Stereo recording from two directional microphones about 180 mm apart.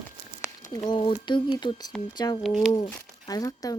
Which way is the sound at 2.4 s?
Centre (ahead or behind).